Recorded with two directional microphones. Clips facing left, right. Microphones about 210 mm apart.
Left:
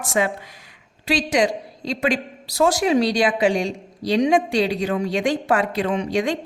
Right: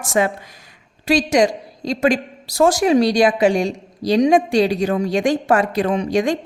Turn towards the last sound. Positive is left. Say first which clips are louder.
# right 3 dB
turn(degrees=-45)  # may be behind; listen again after turning